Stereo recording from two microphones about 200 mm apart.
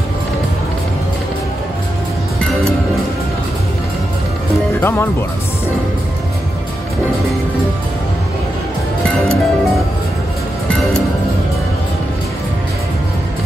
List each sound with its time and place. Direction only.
4.7 s music: 10° left (ahead or behind)
9.0 s music: centre (ahead or behind)
10.7 s music: centre (ahead or behind)